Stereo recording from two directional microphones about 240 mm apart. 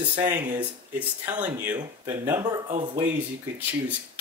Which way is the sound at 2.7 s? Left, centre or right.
Right.